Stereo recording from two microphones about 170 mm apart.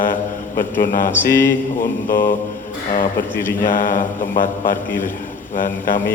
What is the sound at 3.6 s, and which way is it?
Mantra, 50° left (ahead or behind).